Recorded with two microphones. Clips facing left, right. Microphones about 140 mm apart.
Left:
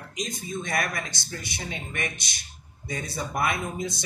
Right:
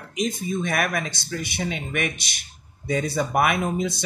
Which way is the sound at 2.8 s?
60° right (ahead or behind).